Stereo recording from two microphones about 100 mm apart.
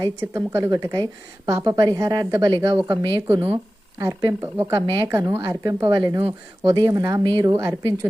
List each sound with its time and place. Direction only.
0.0 s a woman's voice: 30° right (ahead or behind)
2.7 s speech: 25° right (ahead or behind)
3.0 s speech: 50° right (ahead or behind)
3.4 s a woman's voice: 25° right (ahead or behind)
5.8 s a woman's voice: 45° right (ahead or behind)